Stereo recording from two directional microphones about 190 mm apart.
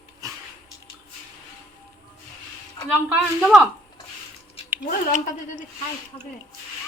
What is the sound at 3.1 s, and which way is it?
Speech, 5° right (ahead or behind).